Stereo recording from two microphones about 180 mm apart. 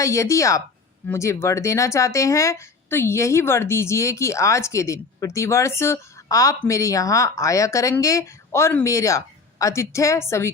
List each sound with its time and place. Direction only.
0.0 s speech: 15° left (ahead or behind)